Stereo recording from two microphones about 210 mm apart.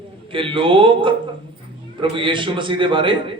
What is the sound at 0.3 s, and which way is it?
A man's voice, 25° right (ahead or behind).